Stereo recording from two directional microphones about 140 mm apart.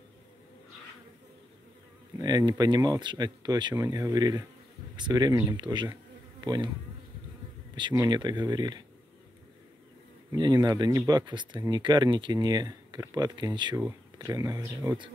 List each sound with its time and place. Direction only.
2.2 s speech: 30° right (ahead or behind)
7.9 s speech: 25° right (ahead or behind)
10.3 s speech: 30° right (ahead or behind)